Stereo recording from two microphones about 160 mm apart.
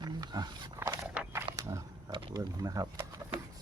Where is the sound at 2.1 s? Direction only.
30° right (ahead or behind).